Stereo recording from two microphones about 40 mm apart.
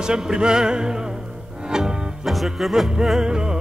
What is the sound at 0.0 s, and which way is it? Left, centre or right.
Music, centre.